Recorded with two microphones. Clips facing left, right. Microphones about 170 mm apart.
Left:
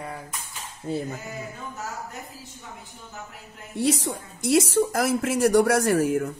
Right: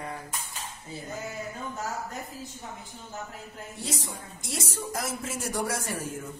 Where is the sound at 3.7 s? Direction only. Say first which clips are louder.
Left 13 dB; 70° left (ahead or behind).